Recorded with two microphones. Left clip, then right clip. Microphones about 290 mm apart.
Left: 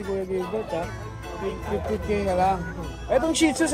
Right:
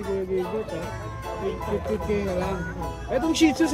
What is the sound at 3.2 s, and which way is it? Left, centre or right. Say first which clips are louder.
Speech: right 1 dB; centre.